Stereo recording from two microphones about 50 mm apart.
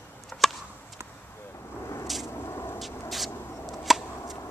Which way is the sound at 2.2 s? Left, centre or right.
Left.